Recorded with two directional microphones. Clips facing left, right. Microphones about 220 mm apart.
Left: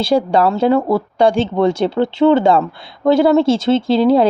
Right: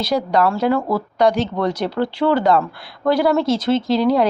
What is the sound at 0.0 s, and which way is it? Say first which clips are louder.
Speech: left 4 dB; 30° left (ahead or behind).